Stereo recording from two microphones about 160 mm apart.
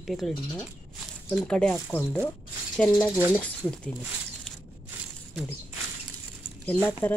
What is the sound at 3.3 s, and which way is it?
Speech, 10° left (ahead or behind).